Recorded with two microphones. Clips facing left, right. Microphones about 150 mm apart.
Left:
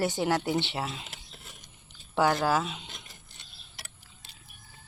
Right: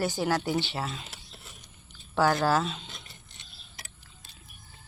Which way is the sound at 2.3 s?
10° left (ahead or behind).